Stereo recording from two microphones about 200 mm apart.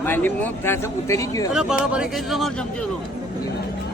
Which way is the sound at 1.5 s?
Centre (ahead or behind).